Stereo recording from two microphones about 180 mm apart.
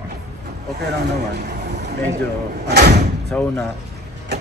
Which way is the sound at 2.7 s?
65° right (ahead or behind).